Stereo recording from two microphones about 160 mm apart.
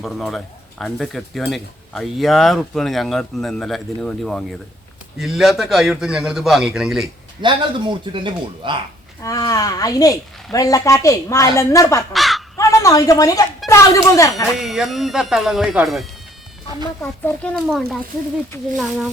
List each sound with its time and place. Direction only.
0.0 s speech: centre (ahead or behind)
7.4 s speech: 30° right (ahead or behind)
9.2 s speech: 20° left (ahead or behind)
12.1 s speech: centre (ahead or behind)
12.5 s a woman's voice: 20° left (ahead or behind)
14.6 s speech: centre (ahead or behind)